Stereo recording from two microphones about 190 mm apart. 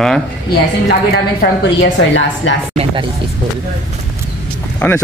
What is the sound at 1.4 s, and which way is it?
Speech, 70° left (ahead or behind).